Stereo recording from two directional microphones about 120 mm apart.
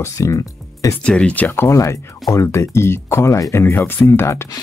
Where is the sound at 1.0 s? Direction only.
10° left (ahead or behind).